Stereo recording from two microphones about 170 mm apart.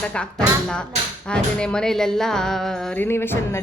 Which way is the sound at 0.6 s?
5° left (ahead or behind).